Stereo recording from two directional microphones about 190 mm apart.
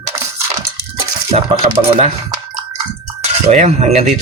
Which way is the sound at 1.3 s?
35° right (ahead or behind).